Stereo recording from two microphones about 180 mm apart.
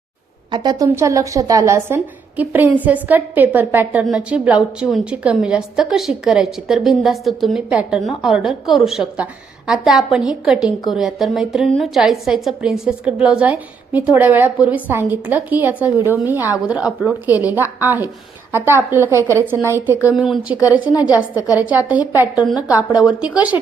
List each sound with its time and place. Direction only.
0.5 s a woman's voice: 25° right (ahead or behind); by 23.6 s 5° right (ahead or behind)